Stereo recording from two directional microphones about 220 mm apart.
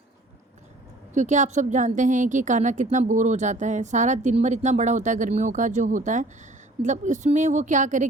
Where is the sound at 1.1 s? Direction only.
35° right (ahead or behind).